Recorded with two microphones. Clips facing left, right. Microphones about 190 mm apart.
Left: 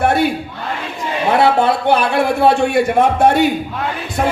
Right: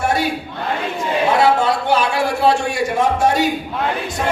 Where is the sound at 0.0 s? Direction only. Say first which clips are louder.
Left 5 dB; 55° left (ahead or behind).